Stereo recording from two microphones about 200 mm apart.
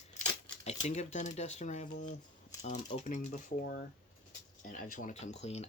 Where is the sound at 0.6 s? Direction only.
35° left (ahead or behind).